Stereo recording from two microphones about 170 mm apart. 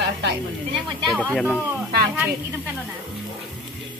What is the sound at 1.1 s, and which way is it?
Speech, 5° left (ahead or behind).